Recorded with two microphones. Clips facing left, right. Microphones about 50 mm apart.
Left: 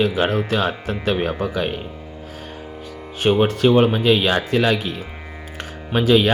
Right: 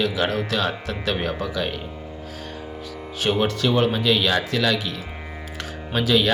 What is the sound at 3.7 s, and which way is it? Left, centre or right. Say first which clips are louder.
Speech: left 5 dB; left.